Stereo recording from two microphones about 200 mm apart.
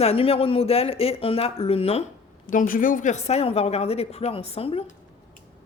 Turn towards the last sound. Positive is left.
turn(degrees=30)  # may be behind; listen again after turning